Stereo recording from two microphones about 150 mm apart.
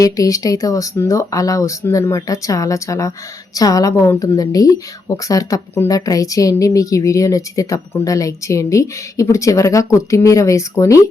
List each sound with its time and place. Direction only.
0.0 s speech: 25° left (ahead or behind)